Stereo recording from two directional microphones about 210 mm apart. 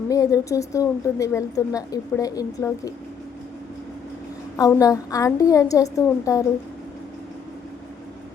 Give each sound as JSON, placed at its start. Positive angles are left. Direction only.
{"t": 0.1, "sound": "a woman's voice", "side_deg": 15}
{"t": 4.5, "sound": "a woman's voice", "side_deg": 15}